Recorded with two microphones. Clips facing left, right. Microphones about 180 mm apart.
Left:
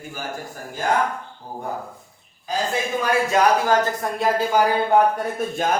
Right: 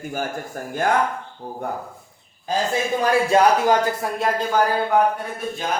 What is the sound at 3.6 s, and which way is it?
Speech, 10° right (ahead or behind).